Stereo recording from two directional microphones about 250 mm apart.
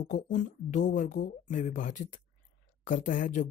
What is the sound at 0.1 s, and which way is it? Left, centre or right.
Speech, left.